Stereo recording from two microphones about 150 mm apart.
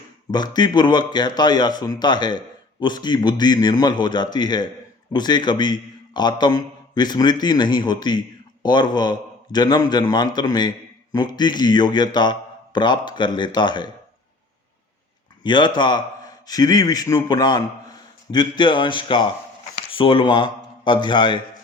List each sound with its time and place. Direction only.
0.3 s a man's voice: 30° left (ahead or behind)
15.4 s a man's voice: 30° left (ahead or behind)